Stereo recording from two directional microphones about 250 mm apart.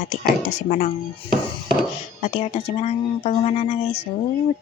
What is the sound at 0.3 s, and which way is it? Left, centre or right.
Speech, left.